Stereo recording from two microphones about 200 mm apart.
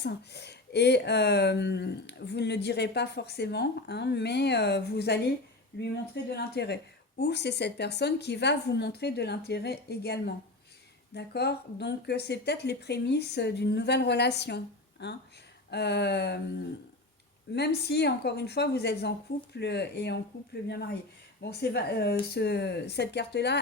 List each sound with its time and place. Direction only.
0.0 s speech: 55° left (ahead or behind)
6.3 s speech: 55° left (ahead or behind)
17.5 s speech: 55° left (ahead or behind)